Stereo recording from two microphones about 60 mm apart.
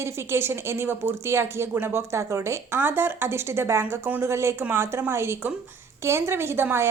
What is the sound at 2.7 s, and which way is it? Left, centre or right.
A woman's voice, right.